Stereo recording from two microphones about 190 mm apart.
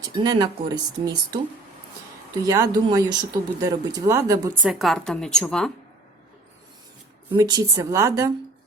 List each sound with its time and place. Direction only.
0.2 s speech: 20° right (ahead or behind)
2.4 s speech: 20° right (ahead or behind)
4.7 s a woman's voice: centre (ahead or behind)
7.3 s speech: 20° right (ahead or behind)